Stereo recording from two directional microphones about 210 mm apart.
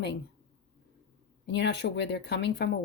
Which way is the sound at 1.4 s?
55° left (ahead or behind).